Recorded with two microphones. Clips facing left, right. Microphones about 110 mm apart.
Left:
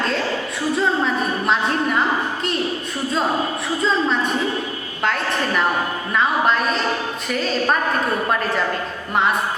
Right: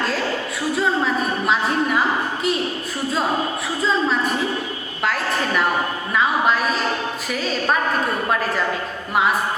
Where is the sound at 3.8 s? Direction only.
Centre (ahead or behind).